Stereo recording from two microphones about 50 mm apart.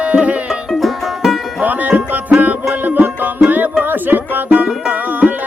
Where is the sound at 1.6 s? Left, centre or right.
Right.